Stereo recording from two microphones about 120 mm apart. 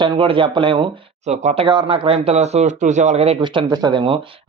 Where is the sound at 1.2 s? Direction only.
70° right (ahead or behind).